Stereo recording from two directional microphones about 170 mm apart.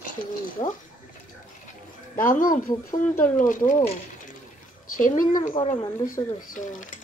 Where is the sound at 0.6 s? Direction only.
40° left (ahead or behind).